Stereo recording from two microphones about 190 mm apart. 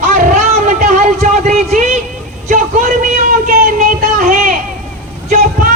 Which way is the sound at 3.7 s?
45° right (ahead or behind).